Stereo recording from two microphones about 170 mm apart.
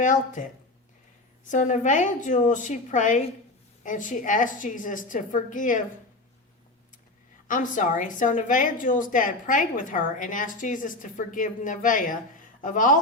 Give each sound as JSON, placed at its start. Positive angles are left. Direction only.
{"t": 0.0, "sound": "a woman's voice", "side_deg": 50}
{"t": 1.5, "sound": "a woman's voice", "side_deg": 45}
{"t": 7.4, "sound": "a woman's voice", "side_deg": 50}